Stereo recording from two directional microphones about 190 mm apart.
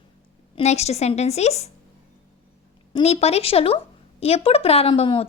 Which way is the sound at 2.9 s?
30° left (ahead or behind).